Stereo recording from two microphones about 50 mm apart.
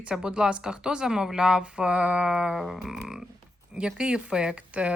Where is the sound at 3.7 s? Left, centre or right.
Centre.